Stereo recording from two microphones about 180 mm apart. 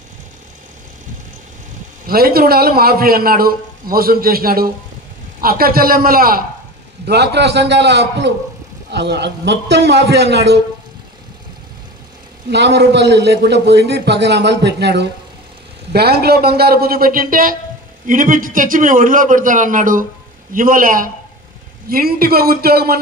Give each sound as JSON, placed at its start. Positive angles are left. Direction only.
{"t": 2.0, "sound": "a man's voice", "side_deg": -55}
{"t": 7.1, "sound": "a man's voice", "side_deg": -70}
{"t": 12.4, "sound": "a man's voice", "side_deg": -70}